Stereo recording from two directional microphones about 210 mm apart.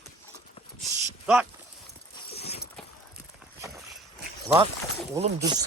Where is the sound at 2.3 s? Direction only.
30° left (ahead or behind).